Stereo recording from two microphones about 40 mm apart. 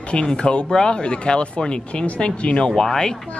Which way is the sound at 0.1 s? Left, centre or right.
Left.